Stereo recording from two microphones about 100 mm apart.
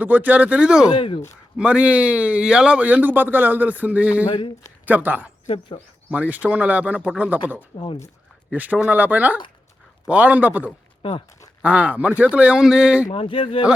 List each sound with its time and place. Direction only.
0.0 s a man's voice: 15° right (ahead or behind)
0.9 s speech: 60° left (ahead or behind)
1.5 s a man's voice: 10° right (ahead or behind)
4.3 s speech: 55° left (ahead or behind)
4.9 s a man's voice: 15° right (ahead or behind)
5.5 s speech: 90° left
6.1 s a man's voice: 15° right (ahead or behind)
13.1 s speech: 65° left (ahead or behind)